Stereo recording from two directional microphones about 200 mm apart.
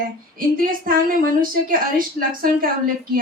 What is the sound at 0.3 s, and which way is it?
A woman's voice, 45° right (ahead or behind).